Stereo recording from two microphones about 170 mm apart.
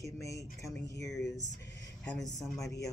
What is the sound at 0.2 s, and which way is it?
Speech, 20° left (ahead or behind).